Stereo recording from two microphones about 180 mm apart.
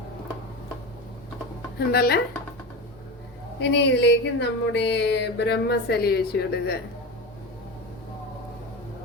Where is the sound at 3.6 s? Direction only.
75° left (ahead or behind).